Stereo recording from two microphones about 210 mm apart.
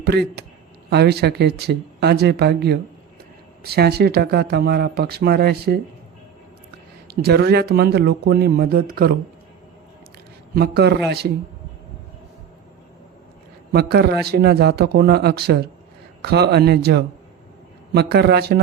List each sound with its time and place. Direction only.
0.0 s speech: 50° right (ahead or behind)
7.1 s speech: 50° right (ahead or behind)
10.5 s speech: 50° right (ahead or behind)
13.7 s speech: 50° right (ahead or behind)